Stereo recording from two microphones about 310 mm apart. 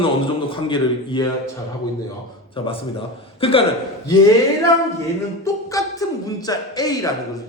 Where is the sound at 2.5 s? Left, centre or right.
Centre.